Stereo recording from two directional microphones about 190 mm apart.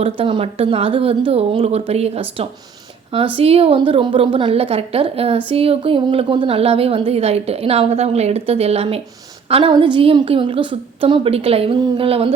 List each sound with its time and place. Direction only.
0.0 s a woman's voice: 30° right (ahead or behind)